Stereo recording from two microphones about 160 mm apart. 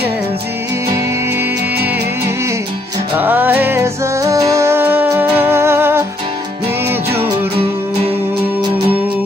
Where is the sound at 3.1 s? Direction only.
10° right (ahead or behind).